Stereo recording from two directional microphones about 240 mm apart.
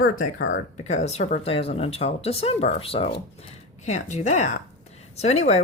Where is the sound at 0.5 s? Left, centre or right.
Left.